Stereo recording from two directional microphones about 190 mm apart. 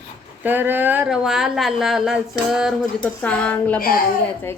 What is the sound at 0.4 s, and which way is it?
Speech, 10° right (ahead or behind).